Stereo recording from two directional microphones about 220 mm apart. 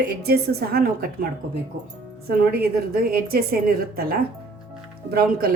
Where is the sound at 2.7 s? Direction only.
45° right (ahead or behind).